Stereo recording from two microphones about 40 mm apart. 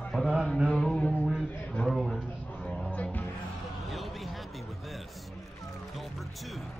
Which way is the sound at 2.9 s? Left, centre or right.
Left.